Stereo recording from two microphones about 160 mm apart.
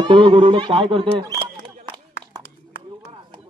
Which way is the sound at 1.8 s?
30° right (ahead or behind).